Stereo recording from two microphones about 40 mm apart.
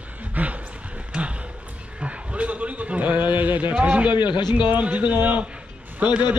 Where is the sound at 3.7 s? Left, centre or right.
Right.